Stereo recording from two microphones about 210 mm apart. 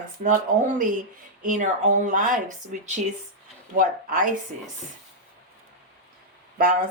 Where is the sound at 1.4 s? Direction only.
35° right (ahead or behind).